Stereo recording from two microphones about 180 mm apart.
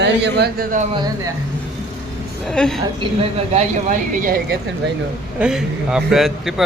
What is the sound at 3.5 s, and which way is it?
Speech, 45° right (ahead or behind).